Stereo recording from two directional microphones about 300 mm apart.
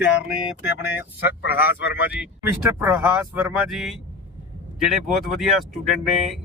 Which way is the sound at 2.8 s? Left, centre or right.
Centre.